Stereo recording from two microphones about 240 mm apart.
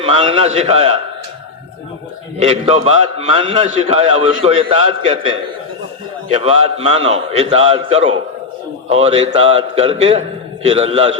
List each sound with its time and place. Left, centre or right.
0.0 s a man's voice: right
2.4 s a man's voice: right
6.3 s a man's voice: right